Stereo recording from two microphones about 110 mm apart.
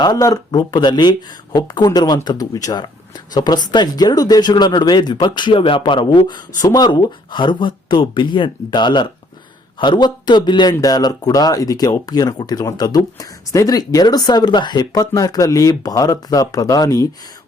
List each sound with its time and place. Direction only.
0.0 s speech: 35° left (ahead or behind)